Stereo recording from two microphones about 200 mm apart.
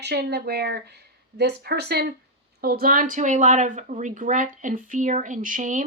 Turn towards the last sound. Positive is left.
turn(degrees=-40)  # may be behind; listen again after turning